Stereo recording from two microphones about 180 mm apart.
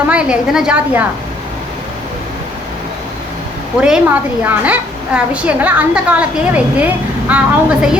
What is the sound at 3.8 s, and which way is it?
A woman's voice, 5° right (ahead or behind).